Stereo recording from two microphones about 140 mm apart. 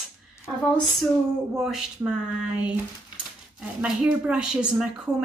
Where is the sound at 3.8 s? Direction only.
5° right (ahead or behind).